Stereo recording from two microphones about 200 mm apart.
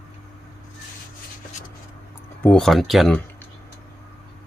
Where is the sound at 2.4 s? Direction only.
5° left (ahead or behind).